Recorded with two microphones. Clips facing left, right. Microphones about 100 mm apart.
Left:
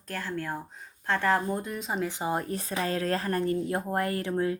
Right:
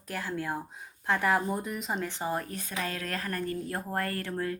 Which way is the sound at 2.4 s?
35° left (ahead or behind).